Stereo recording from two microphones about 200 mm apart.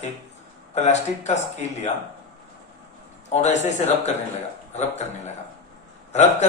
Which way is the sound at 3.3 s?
35° left (ahead or behind).